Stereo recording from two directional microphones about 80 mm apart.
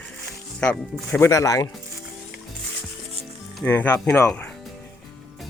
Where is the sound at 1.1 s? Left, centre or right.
Left.